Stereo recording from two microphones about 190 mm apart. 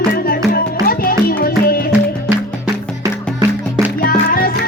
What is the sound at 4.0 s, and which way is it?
Music, 50° left (ahead or behind).